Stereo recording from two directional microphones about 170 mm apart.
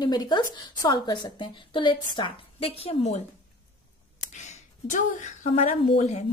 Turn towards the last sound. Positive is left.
turn(degrees=40)  # may be behind; listen again after turning